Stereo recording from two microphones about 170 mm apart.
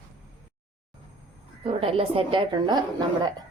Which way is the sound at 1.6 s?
35° right (ahead or behind).